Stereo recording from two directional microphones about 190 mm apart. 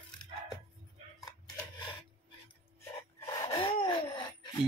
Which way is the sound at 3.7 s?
25° left (ahead or behind).